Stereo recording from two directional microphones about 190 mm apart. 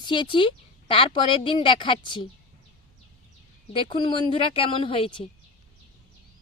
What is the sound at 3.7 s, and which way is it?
A woman's voice, 25° left (ahead or behind).